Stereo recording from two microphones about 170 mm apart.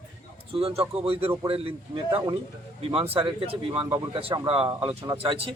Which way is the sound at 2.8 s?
35° right (ahead or behind).